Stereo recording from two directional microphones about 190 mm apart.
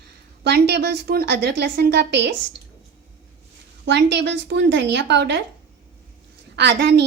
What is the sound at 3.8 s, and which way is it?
A woman's voice, 65° right (ahead or behind).